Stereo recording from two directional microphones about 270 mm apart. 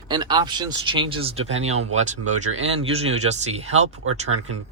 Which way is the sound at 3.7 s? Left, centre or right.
Right.